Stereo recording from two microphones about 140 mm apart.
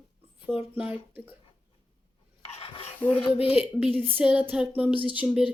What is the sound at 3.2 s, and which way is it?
Speech, 40° left (ahead or behind).